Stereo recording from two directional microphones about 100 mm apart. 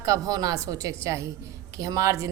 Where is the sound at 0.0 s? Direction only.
35° right (ahead or behind).